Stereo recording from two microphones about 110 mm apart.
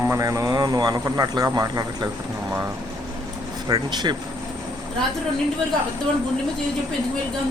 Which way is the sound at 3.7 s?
40° right (ahead or behind).